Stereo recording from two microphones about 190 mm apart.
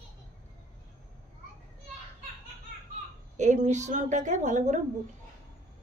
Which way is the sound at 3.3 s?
40° right (ahead or behind).